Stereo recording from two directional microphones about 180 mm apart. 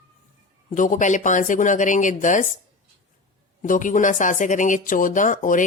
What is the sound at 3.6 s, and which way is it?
Speech, 45° left (ahead or behind).